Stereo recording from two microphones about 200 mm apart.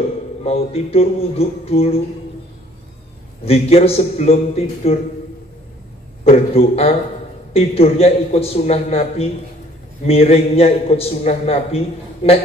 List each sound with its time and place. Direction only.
0.4 s a man's voice: 30° left (ahead or behind)
3.4 s a man's voice: 30° left (ahead or behind)
6.2 s a man's voice: 30° left (ahead or behind)